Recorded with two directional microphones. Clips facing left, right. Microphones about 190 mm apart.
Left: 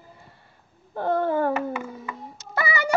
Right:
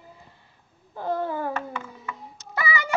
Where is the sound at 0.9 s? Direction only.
55° left (ahead or behind).